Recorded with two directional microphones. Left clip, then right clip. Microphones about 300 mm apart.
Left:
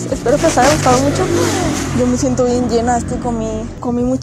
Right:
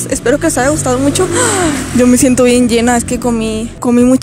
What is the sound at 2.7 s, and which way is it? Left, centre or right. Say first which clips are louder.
Speech: right 3 dB; right.